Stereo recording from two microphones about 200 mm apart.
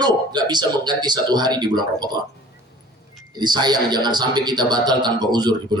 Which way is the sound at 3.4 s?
20° right (ahead or behind).